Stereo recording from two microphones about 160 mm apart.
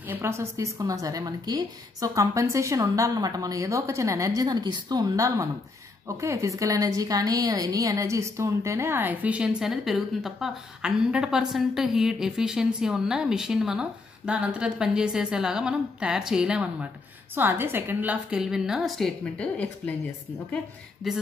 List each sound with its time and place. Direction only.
0.1 s a woman's voice: 15° right (ahead or behind); by 19.7 s 5° left (ahead or behind)